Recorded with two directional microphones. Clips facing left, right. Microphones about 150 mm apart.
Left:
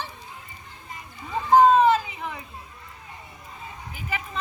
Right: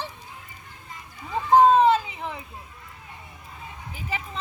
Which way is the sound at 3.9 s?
30° right (ahead or behind).